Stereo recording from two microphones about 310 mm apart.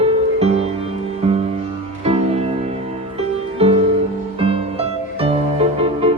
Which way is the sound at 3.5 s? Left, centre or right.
Centre.